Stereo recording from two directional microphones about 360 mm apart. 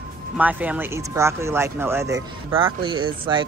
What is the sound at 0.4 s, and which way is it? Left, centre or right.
Speech, centre.